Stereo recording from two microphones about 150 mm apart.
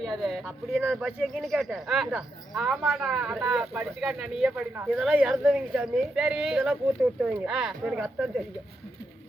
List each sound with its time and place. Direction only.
0.0 s speech: centre (ahead or behind)
0.8 s speech: 10° right (ahead or behind)
1.2 s a woman's voice: centre (ahead or behind)